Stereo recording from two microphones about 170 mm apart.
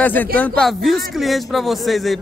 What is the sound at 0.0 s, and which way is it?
Speech, 10° left (ahead or behind).